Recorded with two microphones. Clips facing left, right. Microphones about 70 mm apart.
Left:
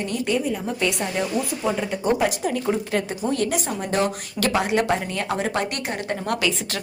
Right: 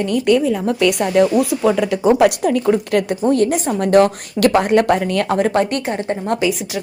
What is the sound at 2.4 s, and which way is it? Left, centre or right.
Speech, right.